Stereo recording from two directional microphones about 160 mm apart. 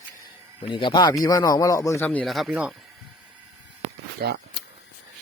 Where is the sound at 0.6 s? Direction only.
30° left (ahead or behind); by 2.8 s 5° right (ahead or behind).